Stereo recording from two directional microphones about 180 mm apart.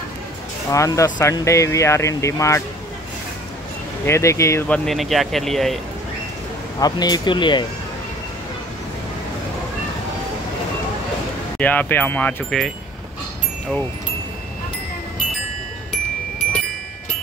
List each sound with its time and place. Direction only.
0.7 s speech: 15° left (ahead or behind)
4.0 s speech: 15° left (ahead or behind)
6.8 s speech: 20° left (ahead or behind)
11.5 s speech: 10° left (ahead or behind)